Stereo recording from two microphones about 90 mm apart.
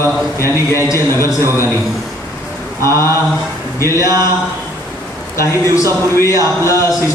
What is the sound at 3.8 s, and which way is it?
Speech, 30° left (ahead or behind).